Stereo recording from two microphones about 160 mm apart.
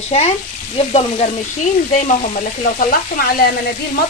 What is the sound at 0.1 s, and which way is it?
Speech, 40° left (ahead or behind).